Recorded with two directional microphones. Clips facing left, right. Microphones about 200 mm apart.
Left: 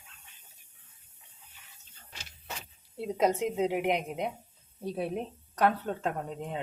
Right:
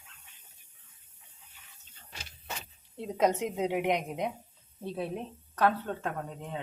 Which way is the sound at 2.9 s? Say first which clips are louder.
Even; 10° left (ahead or behind).